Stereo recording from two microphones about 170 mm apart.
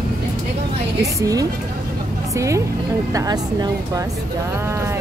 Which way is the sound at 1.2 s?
20° right (ahead or behind).